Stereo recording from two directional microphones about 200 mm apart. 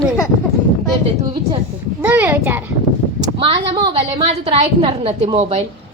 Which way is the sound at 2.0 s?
10° right (ahead or behind).